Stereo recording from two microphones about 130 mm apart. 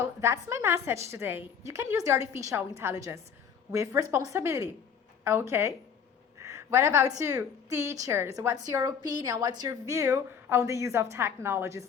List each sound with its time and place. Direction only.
0.2 s a woman's voice: 20° right (ahead or behind)